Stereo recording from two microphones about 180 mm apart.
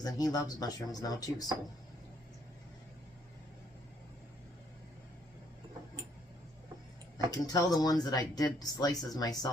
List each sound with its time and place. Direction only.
0.0 s speech: 20° left (ahead or behind)
7.3 s speech: 20° left (ahead or behind)